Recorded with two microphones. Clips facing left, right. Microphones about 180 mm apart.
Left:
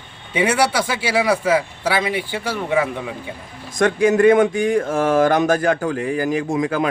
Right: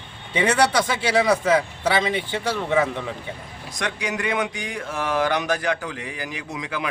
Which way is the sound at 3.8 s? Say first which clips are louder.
Left 13 dB; 50° left (ahead or behind).